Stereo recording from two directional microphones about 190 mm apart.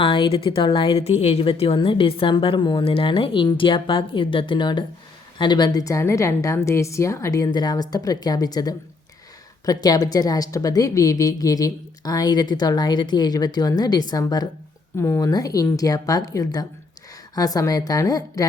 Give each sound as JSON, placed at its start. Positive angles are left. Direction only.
{"t": 0.0, "sound": "a woman's voice", "side_deg": 25}